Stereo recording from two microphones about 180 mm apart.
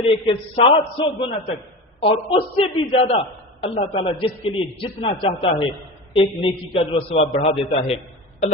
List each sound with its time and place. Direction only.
0.0 s a man's voice: 30° left (ahead or behind)